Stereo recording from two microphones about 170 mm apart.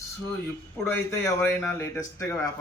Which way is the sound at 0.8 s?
15° left (ahead or behind).